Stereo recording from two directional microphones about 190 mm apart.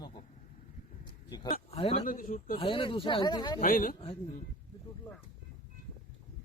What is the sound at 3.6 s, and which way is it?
Speech, 45° left (ahead or behind).